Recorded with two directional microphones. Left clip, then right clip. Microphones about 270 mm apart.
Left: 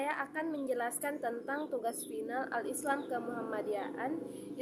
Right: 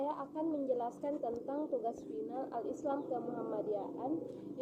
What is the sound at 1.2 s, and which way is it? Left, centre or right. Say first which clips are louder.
A woman's voice: left 2 dB; left.